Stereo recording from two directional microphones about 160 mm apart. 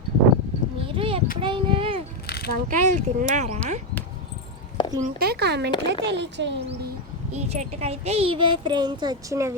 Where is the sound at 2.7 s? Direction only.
50° right (ahead or behind).